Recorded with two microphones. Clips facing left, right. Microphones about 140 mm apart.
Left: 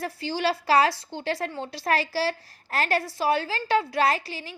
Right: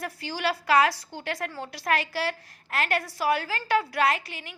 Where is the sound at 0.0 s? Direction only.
30° left (ahead or behind).